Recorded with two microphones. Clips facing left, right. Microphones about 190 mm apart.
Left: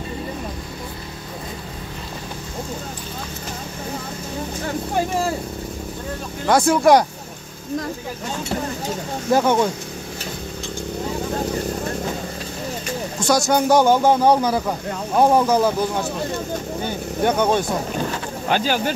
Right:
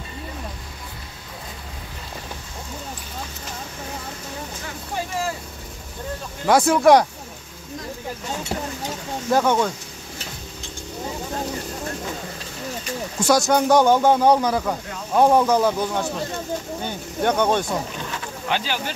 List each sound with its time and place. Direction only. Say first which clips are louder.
6.4 s a man's voice: even; 5° right (ahead or behind)
9.3 s speech: left 2 dB; 10° left (ahead or behind)
13.2 s a man's voice: even; centre (ahead or behind)
17.2 s speech: left 1 dB; 5° left (ahead or behind)
17.9 s speech: left 6 dB; 45° left (ahead or behind)